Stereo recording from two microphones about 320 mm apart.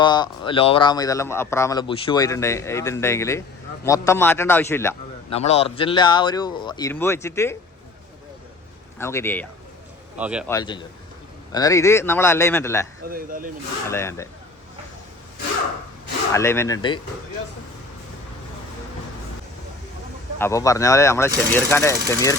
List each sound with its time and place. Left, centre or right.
0.0 s speech: centre
5.3 s speech: centre
9.0 s speech: centre
10.5 s speech: centre
13.1 s speech: right
13.8 s speech: centre
16.3 s speech: centre
20.4 s speech: centre